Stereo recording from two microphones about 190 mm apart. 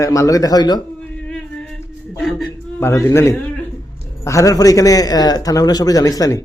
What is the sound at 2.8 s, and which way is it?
A man's voice, 15° left (ahead or behind).